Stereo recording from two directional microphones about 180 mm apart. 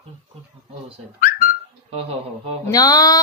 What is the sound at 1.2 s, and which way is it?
Whistling, 50° left (ahead or behind).